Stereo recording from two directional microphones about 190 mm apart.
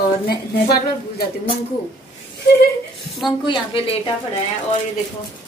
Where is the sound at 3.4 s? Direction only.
25° left (ahead or behind).